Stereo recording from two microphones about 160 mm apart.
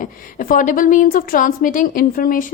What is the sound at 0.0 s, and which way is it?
A woman's voice, 60° left (ahead or behind).